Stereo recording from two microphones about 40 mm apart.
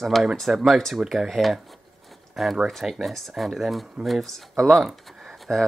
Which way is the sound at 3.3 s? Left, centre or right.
Centre.